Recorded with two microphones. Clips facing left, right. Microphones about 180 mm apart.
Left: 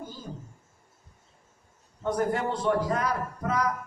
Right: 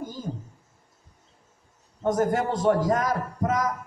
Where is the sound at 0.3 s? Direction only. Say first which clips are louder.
Right 6 dB; 40° right (ahead or behind).